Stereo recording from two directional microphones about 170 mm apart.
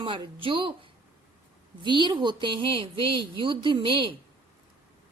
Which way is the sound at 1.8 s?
25° right (ahead or behind).